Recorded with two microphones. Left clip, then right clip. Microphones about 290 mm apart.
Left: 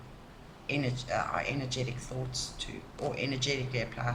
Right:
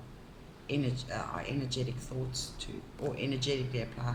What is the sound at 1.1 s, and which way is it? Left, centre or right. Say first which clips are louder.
Speech: left 6 dB; left.